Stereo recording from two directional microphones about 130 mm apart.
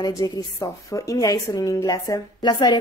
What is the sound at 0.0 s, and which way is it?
A woman's voice, 30° left (ahead or behind).